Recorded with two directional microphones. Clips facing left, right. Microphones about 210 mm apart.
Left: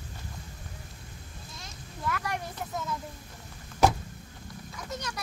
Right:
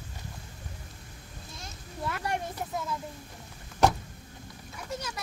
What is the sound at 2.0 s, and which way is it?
Speech, 25° right (ahead or behind).